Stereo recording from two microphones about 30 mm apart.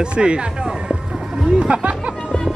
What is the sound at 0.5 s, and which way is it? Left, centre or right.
Speech, right.